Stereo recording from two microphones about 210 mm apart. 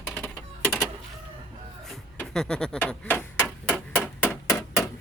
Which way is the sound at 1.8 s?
Centre (ahead or behind).